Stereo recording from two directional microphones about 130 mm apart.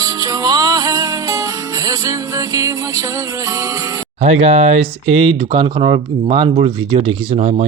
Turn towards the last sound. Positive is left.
turn(degrees=-65)  # may be behind; listen again after turning